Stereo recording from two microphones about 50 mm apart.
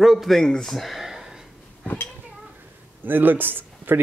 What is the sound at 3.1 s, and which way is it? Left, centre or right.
Speech, right.